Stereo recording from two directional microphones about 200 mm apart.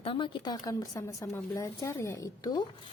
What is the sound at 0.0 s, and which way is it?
A woman's voice, 25° left (ahead or behind).